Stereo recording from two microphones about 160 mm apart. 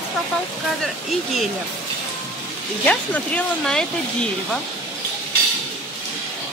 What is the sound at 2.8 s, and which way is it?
Speech, 10° left (ahead or behind).